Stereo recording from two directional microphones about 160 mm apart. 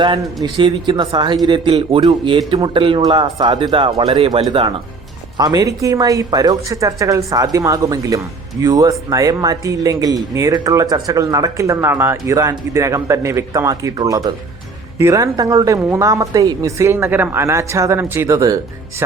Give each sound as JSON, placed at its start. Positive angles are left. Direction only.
{"t": 0.4, "sound": "a man's voice", "side_deg": -30}
{"t": 5.4, "sound": "speech", "side_deg": -25}